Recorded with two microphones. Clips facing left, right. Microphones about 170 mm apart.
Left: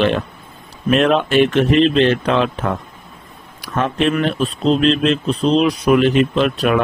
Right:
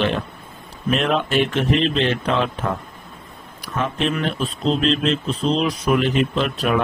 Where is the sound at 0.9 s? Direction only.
70° left (ahead or behind).